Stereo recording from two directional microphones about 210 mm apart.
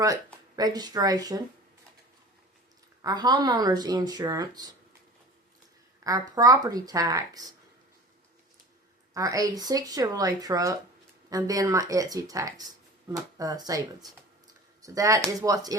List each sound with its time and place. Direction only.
0.5 s speech: 20° right (ahead or behind)
3.0 s speech: 20° right (ahead or behind)
6.1 s speech: 15° right (ahead or behind)
9.1 s speech: 15° right (ahead or behind)